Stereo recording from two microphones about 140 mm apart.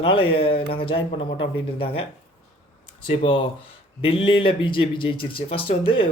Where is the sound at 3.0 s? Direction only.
35° left (ahead or behind).